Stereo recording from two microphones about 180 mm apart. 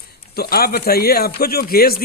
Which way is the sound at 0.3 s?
60° left (ahead or behind).